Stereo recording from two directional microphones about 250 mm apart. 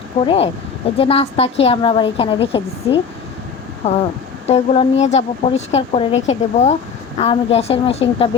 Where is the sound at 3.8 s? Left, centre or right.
Left.